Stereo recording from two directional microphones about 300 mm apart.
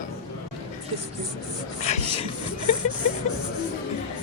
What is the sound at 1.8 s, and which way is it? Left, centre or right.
Speech, centre.